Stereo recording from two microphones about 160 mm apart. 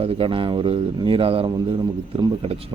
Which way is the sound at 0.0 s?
35° right (ahead or behind).